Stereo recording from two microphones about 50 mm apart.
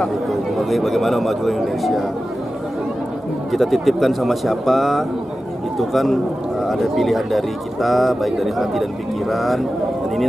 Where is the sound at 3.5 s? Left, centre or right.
Centre.